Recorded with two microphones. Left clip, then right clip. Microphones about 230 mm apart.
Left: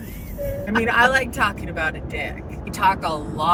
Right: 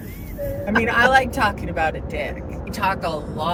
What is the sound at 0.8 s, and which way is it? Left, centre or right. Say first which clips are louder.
Speech: right 1 dB; centre.